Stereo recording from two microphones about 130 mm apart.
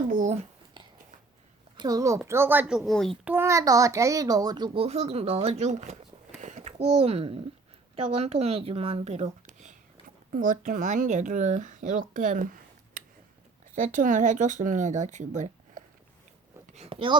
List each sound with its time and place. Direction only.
0.1 s a sound: 85° right
1.7 s speech: 30° right (ahead or behind); by 3.2 s 5° left (ahead or behind)
3.2 s a child's voice: 20° right (ahead or behind); by 4.8 s 35° right (ahead or behind)
4.8 s a child's voice: 55° right (ahead or behind)
10.3 s speech: 90° right; by 15.8 s 70° right (ahead or behind)
16.7 s a sound: 50° right (ahead or behind)